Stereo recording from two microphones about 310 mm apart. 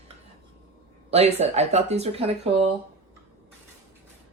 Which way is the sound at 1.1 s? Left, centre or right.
Centre.